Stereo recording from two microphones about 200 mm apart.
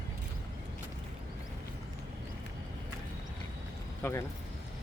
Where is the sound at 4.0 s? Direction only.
10° left (ahead or behind).